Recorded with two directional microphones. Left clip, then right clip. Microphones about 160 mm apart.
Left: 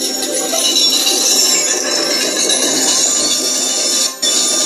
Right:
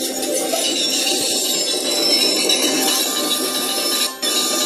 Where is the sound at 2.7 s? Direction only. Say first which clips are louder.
Left 3 dB; 10° right (ahead or behind).